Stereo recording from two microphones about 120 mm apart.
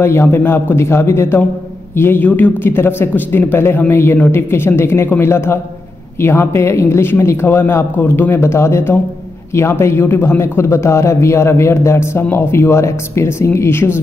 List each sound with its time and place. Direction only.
0.0 s a man's voice: 20° left (ahead or behind)